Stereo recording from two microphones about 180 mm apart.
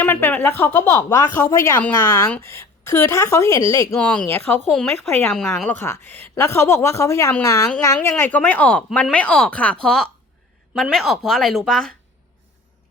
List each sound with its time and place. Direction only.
0.0 s a woman's voice: 10° left (ahead or behind)
3.9 s a woman's voice: 5° left (ahead or behind)